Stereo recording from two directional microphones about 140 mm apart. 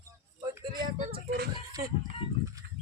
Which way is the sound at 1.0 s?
90° right.